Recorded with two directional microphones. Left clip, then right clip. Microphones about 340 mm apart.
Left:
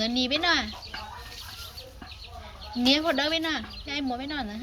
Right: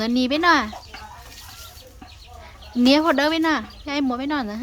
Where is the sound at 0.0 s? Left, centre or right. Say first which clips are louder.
Right 6 dB; centre.